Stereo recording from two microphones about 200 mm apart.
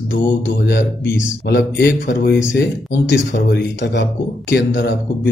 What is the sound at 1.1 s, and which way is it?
A man's voice, 60° left (ahead or behind).